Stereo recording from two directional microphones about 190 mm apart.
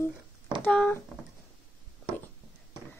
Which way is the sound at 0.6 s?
5° left (ahead or behind).